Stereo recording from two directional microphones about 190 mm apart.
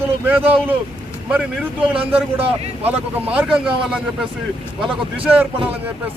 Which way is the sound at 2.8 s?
10° right (ahead or behind).